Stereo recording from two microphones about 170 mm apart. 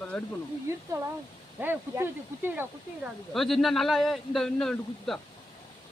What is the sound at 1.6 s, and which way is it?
Speech, 10° right (ahead or behind).